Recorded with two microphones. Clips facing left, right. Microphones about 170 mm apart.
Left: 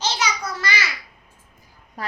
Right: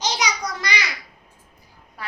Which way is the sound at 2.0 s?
40° left (ahead or behind).